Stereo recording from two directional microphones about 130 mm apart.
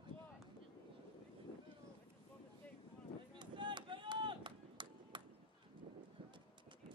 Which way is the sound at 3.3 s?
35° right (ahead or behind).